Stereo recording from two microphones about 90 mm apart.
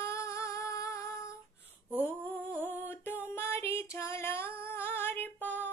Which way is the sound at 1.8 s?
20° right (ahead or behind).